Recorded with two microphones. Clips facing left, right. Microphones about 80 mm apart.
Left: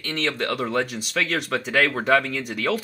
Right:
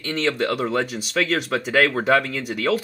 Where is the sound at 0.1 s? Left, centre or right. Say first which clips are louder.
Right 3 dB; centre.